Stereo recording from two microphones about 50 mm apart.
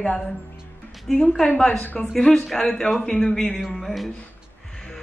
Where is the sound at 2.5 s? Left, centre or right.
Centre.